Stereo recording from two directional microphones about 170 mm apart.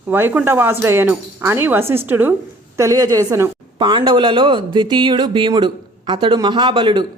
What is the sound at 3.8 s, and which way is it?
Speech, 30° right (ahead or behind).